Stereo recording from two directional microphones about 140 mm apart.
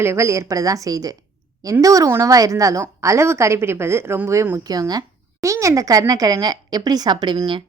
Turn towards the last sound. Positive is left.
turn(degrees=-35)  # may be behind; listen again after turning